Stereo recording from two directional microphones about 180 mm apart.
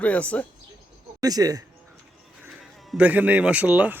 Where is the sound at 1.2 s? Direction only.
20° right (ahead or behind).